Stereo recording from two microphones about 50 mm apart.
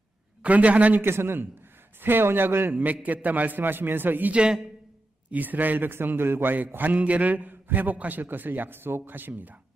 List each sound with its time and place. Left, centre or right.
0.4 s a man's voice: right
1.0 s speech: right
2.7 s a man's voice: right
4.3 s a man's voice: centre
5.3 s a man's voice: right